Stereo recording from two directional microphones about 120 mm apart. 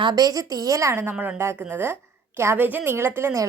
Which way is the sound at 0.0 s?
35° right (ahead or behind).